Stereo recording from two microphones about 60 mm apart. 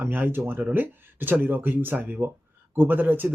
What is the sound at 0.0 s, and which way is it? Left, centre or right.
Speech, right.